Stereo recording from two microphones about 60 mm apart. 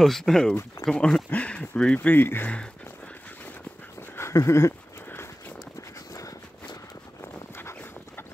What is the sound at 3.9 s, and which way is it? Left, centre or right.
Dog, left.